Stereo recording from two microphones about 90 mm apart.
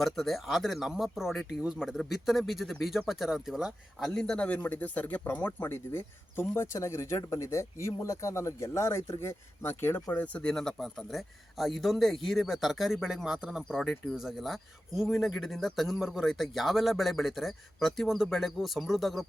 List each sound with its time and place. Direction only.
0.0 s speech: centre (ahead or behind)
4.1 s a man's voice: 10° left (ahead or behind); by 10.2 s 25° left (ahead or behind)
10.3 s speech: 10° left (ahead or behind)